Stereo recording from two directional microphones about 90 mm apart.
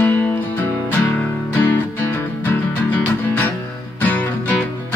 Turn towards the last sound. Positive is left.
turn(degrees=20)  # may be behind; listen again after turning